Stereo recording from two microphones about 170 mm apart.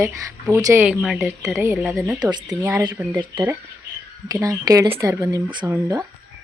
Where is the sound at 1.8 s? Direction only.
Centre (ahead or behind).